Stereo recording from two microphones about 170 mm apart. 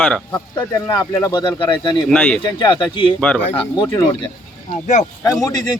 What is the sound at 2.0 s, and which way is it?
Speech, 5° left (ahead or behind).